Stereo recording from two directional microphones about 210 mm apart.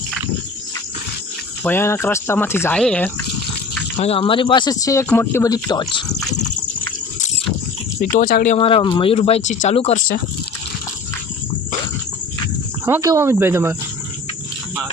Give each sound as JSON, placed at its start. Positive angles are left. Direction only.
{"t": 1.6, "sound": "speech", "side_deg": 10}
{"t": 3.9, "sound": "speech", "side_deg": 30}
{"t": 8.1, "sound": "speech", "side_deg": 40}
{"t": 8.5, "sound": "speech", "side_deg": 25}
{"t": 12.8, "sound": "speech", "side_deg": -15}